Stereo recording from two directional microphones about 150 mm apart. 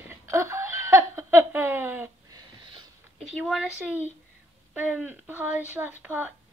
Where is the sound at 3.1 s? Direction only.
5° right (ahead or behind).